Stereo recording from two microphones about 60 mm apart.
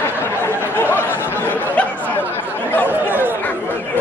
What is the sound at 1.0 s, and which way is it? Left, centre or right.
Chatter, right.